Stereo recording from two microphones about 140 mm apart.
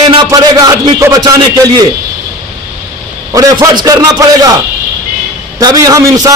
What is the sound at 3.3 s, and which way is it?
A man's voice, 25° right (ahead or behind).